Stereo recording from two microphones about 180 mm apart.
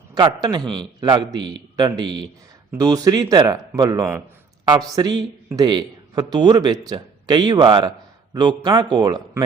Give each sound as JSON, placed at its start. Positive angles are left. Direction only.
{"t": 0.1, "sound": "a man's voice", "side_deg": -20}